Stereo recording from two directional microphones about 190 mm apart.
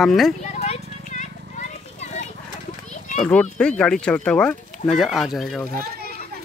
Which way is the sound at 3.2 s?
5° left (ahead or behind).